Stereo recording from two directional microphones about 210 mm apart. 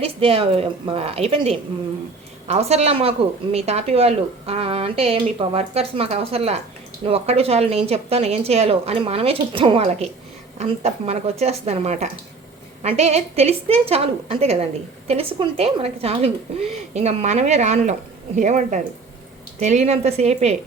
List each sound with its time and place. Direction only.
0.0 s a woman's voice: 25° right (ahead or behind)